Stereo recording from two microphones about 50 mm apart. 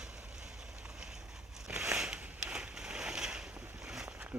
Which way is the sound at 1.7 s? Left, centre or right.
Right.